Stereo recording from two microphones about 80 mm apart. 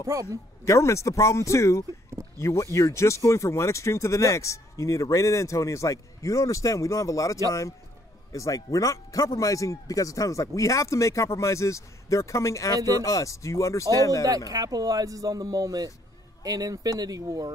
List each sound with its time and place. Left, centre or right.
0.0 s speech: right
0.7 s speech: left
14.5 s speech: right